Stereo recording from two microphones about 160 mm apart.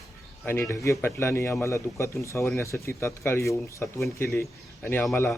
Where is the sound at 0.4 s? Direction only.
15° left (ahead or behind).